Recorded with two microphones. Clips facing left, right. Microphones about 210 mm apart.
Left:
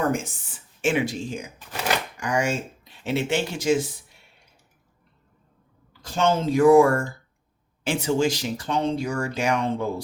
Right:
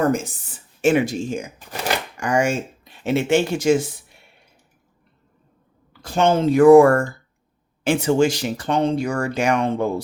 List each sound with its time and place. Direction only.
0.0 s speech: 40° right (ahead or behind); by 4.2 s 55° right (ahead or behind)
6.1 s speech: 65° right (ahead or behind)